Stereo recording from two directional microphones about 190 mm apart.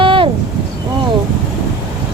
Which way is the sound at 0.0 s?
25° right (ahead or behind).